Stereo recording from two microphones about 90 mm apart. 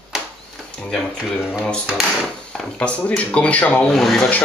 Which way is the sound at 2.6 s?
10° left (ahead or behind).